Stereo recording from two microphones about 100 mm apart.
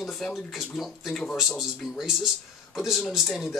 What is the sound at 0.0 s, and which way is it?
Speech, centre (ahead or behind).